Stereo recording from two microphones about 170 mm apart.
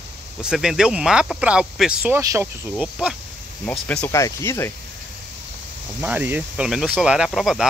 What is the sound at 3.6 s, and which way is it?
Speech, 5° left (ahead or behind).